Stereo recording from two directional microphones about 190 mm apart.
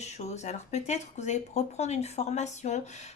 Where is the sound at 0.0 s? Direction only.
35° left (ahead or behind).